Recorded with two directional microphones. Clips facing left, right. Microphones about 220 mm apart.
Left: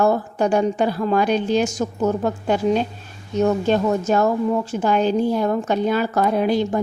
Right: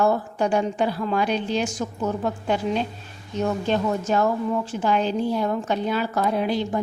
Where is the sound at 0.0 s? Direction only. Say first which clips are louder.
Left 3 dB; 45° left (ahead or behind).